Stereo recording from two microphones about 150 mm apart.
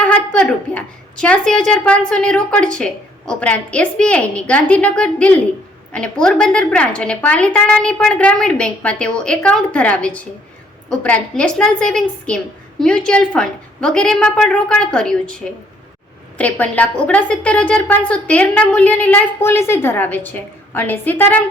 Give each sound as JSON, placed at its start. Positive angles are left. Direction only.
{"t": 0.0, "sound": "a woman's voice", "side_deg": 5}
{"t": 16.4, "sound": "a woman's voice", "side_deg": 10}